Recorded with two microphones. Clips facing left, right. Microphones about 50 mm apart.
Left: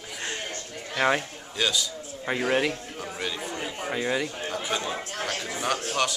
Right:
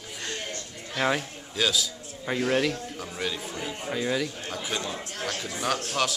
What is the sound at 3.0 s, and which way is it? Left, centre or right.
Speech, centre.